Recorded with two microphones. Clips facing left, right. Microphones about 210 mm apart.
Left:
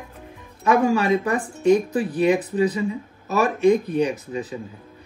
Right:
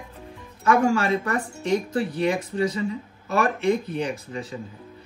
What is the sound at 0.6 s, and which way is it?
Speech, 20° left (ahead or behind).